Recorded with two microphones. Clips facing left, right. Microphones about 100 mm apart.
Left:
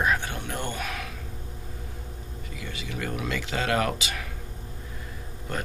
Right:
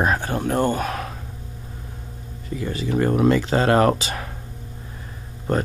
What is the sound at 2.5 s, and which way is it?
Speech, 35° right (ahead or behind).